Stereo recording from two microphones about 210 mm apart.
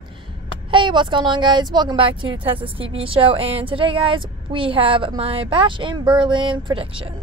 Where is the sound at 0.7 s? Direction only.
20° right (ahead or behind).